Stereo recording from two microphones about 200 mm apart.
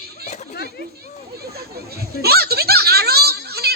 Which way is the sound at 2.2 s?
50° right (ahead or behind).